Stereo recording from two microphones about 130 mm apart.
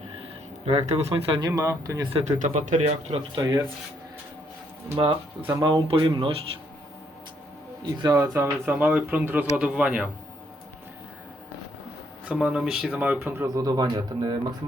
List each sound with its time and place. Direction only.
0.2 s speech: 50° right (ahead or behind)
1.5 s speech: 25° right (ahead or behind)
2.1 s speech: 65° right (ahead or behind)
4.9 s speech: 45° right (ahead or behind)
7.8 s speech: 30° right (ahead or behind); by 10.1 s 10° right (ahead or behind)
12.2 s speech: 10° right (ahead or behind); by 14.3 s 35° right (ahead or behind)